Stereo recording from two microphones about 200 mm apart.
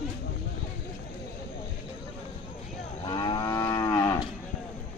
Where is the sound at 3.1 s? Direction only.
20° left (ahead or behind).